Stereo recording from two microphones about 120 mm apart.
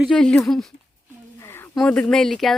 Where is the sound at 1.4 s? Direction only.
20° left (ahead or behind).